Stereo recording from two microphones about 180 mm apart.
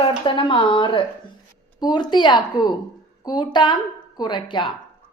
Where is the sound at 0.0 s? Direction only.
25° left (ahead or behind).